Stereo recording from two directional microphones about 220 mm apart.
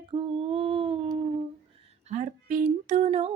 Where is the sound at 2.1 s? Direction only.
35° right (ahead or behind).